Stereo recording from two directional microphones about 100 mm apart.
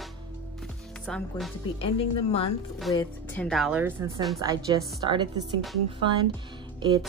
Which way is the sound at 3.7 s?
20° right (ahead or behind).